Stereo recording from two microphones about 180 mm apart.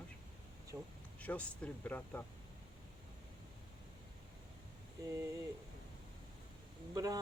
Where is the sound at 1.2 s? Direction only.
5° left (ahead or behind).